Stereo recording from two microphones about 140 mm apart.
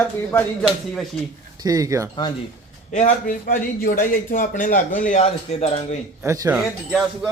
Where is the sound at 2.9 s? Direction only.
75° left (ahead or behind); by 5.8 s 50° left (ahead or behind).